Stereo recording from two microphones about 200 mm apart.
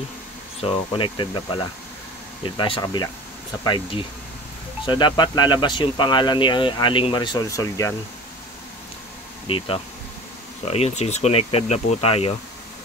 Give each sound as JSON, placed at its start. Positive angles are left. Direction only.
{"t": 0.6, "sound": "speech", "side_deg": 25}
{"t": 9.5, "sound": "speech", "side_deg": 30}